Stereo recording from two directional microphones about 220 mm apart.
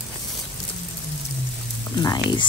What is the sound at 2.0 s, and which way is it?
Speech, 20° left (ahead or behind).